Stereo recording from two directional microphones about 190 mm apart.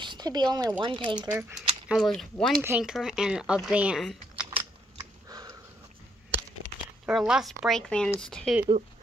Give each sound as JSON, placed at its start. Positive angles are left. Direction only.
{"t": 0.0, "sound": "speech", "side_deg": -25}
{"t": 1.9, "sound": "speech", "side_deg": 0}
{"t": 4.5, "sound": "scissors", "side_deg": -20}
{"t": 7.1, "sound": "speech", "side_deg": -5}